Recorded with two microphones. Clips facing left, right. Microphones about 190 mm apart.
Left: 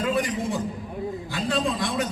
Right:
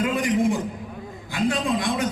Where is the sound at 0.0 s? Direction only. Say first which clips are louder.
Right 2 dB; 20° right (ahead or behind).